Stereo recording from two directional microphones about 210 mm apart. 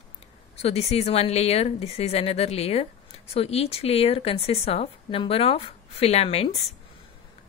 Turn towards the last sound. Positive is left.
turn(degrees=30)  # may be behind; listen again after turning